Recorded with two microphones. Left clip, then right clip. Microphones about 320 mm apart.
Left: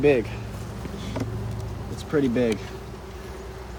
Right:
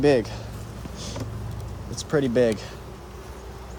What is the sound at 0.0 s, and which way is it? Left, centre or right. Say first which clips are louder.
Speech: even; right.